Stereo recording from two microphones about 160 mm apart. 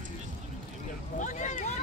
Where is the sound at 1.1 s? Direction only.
50° left (ahead or behind).